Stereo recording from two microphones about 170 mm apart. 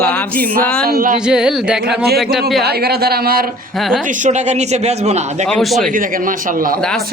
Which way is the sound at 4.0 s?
50° right (ahead or behind).